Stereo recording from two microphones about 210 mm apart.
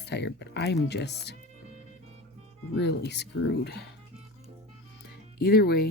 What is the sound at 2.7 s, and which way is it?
Speech, 50° left (ahead or behind).